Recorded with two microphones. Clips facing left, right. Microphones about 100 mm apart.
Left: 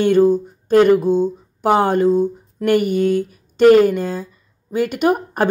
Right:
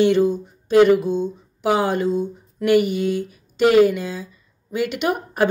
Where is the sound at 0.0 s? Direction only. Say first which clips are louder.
Left 3 dB; 45° left (ahead or behind).